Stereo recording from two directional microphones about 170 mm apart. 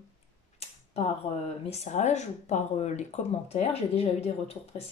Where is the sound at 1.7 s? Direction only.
40° left (ahead or behind).